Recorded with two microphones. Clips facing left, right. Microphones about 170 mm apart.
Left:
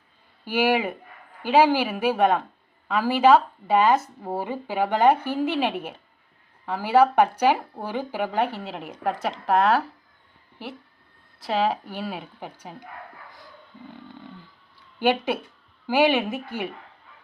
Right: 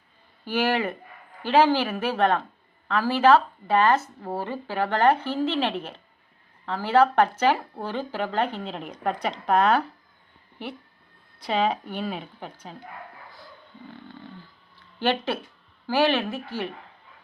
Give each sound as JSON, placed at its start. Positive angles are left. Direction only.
{"t": 0.4, "sound": "a woman's voice", "side_deg": 10}
{"t": 11.3, "sound": "a woman's voice", "side_deg": 5}
{"t": 14.9, "sound": "a woman's voice", "side_deg": 15}